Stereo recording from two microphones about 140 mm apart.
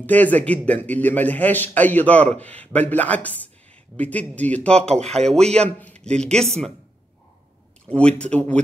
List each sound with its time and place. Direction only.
0.0 s a man's voice: 10° left (ahead or behind)
5.0 s speech: 50° right (ahead or behind)
5.5 s speech: 10° left (ahead or behind)
8.2 s a man's voice: 10° left (ahead or behind)